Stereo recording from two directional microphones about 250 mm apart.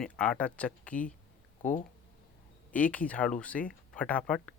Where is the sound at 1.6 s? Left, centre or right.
Left.